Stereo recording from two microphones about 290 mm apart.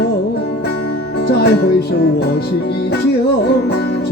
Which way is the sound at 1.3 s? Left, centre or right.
Left.